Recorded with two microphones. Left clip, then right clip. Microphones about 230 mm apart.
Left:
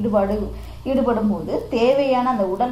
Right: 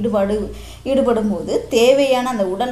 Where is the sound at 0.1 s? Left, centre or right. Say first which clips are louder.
Right 1 dB; right.